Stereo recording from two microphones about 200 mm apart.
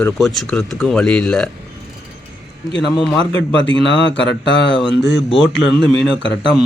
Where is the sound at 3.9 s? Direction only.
65° left (ahead or behind).